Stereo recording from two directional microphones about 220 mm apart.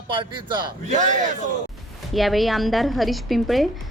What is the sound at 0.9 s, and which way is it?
Speech, 35° right (ahead or behind).